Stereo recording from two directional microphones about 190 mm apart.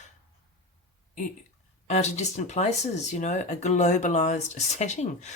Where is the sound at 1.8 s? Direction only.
35° left (ahead or behind).